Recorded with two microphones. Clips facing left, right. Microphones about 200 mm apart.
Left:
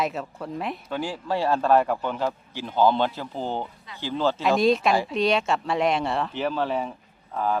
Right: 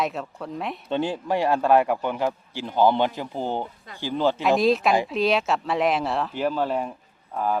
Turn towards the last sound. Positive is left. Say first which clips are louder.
# even
turn(degrees=-5)  # may be behind; listen again after turning